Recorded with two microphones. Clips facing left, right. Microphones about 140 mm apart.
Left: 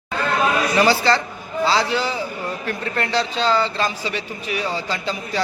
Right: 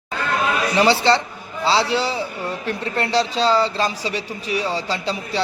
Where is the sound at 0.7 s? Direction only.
30° right (ahead or behind).